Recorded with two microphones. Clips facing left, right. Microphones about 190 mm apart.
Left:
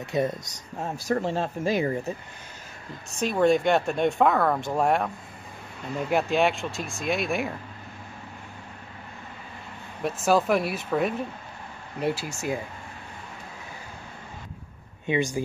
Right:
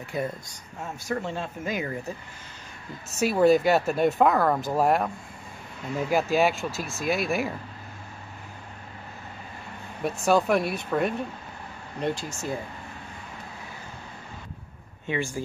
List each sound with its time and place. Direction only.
0.0 s speech: 20° left (ahead or behind)
0.7 s speech: 35° left (ahead or behind)
3.2 s speech: 5° right (ahead or behind)
10.0 s speech: centre (ahead or behind)
15.0 s speech: 20° left (ahead or behind)